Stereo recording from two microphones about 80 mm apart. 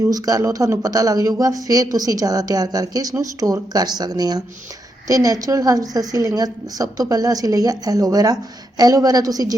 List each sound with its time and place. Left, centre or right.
0.0 s speech: right